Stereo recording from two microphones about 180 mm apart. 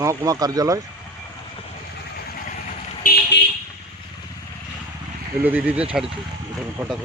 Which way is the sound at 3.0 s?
50° left (ahead or behind).